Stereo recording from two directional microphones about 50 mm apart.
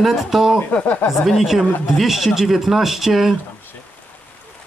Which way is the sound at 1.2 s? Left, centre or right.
Centre.